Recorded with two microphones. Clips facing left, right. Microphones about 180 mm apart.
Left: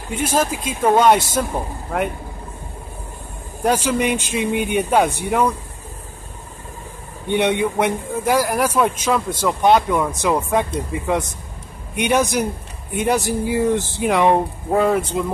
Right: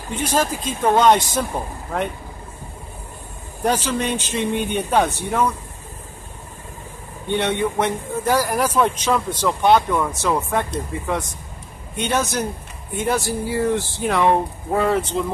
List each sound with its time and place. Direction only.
0.1 s a man's voice: 10° left (ahead or behind)
3.6 s a man's voice: 10° left (ahead or behind)
7.2 s a man's voice: 15° left (ahead or behind)